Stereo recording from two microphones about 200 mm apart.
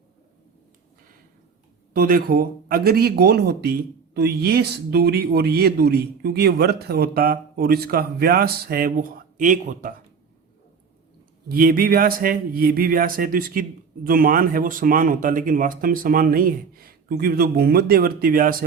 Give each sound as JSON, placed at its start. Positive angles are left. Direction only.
{"t": 1.9, "sound": "speech", "side_deg": -45}
{"t": 11.4, "sound": "speech", "side_deg": -45}